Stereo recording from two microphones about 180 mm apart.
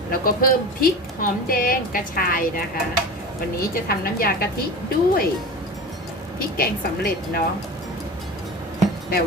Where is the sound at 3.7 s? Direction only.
55° left (ahead or behind).